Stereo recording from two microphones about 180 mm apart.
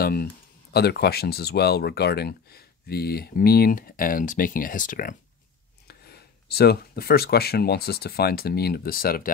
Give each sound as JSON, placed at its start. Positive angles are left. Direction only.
{"t": 0.0, "sound": "speech", "side_deg": 55}
{"t": 5.9, "sound": "speech", "side_deg": 60}